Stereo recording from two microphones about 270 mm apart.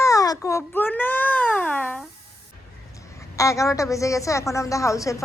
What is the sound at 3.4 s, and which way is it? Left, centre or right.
A child's voice, centre.